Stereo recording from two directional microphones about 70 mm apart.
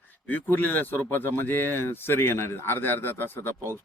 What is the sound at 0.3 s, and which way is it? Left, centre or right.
Speech, left.